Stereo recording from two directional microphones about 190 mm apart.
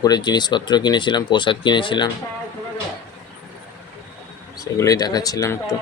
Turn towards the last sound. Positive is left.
turn(degrees=20)  # may be behind; listen again after turning